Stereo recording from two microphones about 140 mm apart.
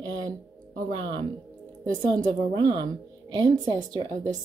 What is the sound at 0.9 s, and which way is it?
A woman's voice, 35° right (ahead or behind).